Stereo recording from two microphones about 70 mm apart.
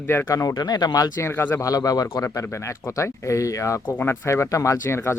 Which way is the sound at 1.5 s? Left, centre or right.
Left.